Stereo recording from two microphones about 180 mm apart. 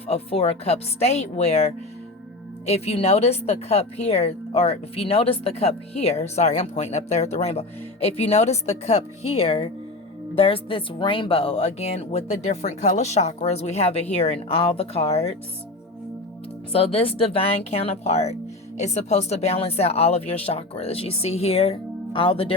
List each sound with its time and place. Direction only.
0.1 s a woman's voice: 35° left (ahead or behind)
16.7 s a woman's voice: 30° left (ahead or behind)